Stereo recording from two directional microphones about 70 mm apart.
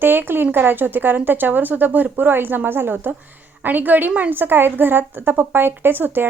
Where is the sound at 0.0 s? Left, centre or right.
Right.